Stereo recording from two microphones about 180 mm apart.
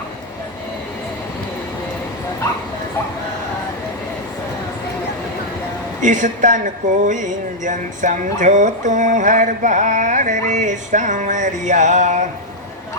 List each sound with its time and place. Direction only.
6.0 s speech: 45° right (ahead or behind)